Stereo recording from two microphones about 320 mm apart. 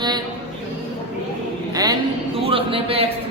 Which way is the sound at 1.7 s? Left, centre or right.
Centre.